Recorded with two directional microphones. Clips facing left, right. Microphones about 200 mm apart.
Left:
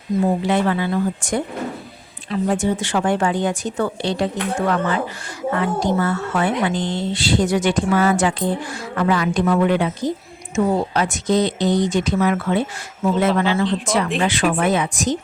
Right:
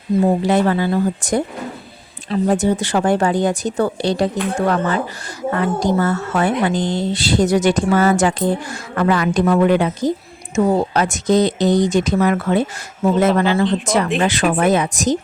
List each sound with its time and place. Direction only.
0.4 s speech: 40° right (ahead or behind)